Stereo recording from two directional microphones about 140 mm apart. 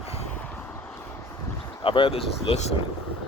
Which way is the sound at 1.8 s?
40° left (ahead or behind).